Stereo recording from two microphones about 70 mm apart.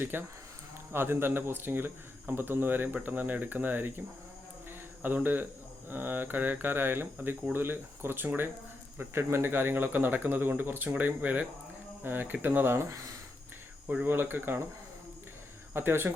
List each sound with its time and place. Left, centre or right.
0.0 s a man's voice: right
5.0 s a man's voice: right
13.8 s a man's voice: right
15.7 s speech: right